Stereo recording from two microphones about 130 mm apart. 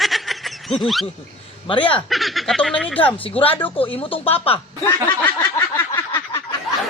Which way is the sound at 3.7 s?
40° left (ahead or behind).